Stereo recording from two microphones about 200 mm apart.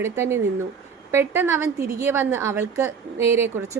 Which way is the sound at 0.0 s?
15° right (ahead or behind).